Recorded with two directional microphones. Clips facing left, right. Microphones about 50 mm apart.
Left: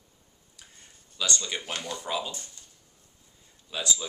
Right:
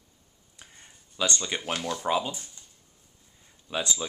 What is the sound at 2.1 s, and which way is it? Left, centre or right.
Speech, right.